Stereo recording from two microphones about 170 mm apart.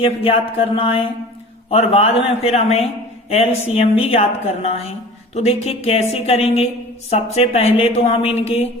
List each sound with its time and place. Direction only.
0.0 s a woman's voice: 35° left (ahead or behind)